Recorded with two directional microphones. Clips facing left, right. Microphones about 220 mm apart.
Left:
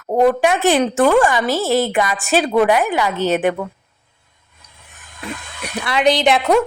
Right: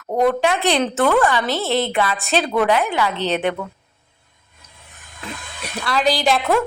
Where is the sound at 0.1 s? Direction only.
15° left (ahead or behind).